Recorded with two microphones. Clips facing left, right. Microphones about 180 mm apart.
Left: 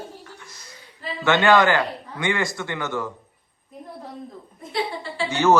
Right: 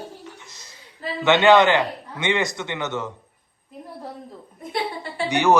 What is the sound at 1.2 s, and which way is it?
A man's voice, 20° right (ahead or behind).